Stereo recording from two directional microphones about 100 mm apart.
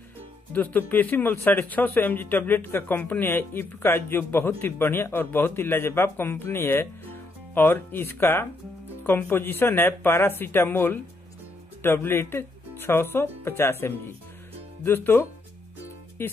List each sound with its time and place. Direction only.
0.5 s speech: 15° left (ahead or behind)